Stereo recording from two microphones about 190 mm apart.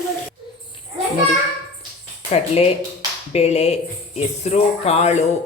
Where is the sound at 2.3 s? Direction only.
35° left (ahead or behind).